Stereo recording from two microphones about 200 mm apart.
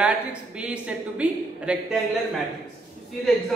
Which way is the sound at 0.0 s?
5° right (ahead or behind).